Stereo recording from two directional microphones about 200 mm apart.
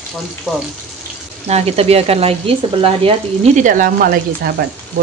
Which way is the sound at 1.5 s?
30° right (ahead or behind).